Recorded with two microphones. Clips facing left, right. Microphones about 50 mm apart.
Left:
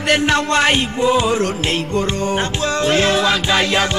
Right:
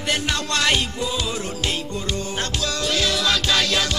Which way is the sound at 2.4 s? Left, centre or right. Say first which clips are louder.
Left 7 dB; left.